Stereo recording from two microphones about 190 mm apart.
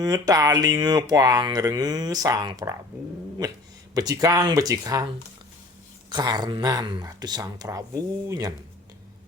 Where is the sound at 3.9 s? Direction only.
20° right (ahead or behind).